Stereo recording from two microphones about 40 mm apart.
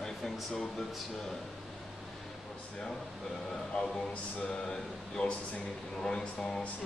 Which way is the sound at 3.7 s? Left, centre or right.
Centre.